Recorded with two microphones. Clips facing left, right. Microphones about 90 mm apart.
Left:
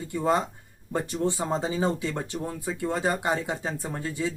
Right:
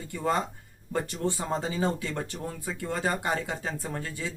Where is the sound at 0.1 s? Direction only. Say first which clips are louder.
Left 3 dB; 20° left (ahead or behind).